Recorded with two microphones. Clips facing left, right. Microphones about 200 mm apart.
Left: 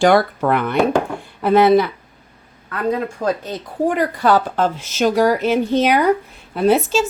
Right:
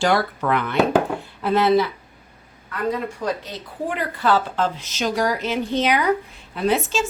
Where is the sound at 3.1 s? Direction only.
50° left (ahead or behind).